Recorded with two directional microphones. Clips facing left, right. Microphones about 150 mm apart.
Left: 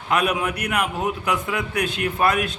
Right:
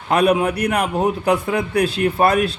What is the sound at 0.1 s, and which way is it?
A man's voice, 35° right (ahead or behind).